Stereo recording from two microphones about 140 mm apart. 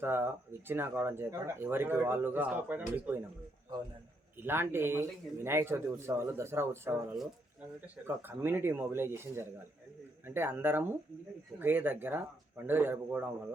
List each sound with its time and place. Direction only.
0.0 s speech: 15° right (ahead or behind)
4.4 s speech: 15° right (ahead or behind)
8.0 s speech: 15° right (ahead or behind)